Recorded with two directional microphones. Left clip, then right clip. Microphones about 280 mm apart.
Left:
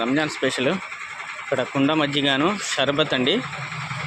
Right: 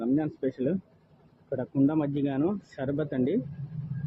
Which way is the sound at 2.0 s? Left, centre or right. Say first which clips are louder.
Left 9 dB; centre.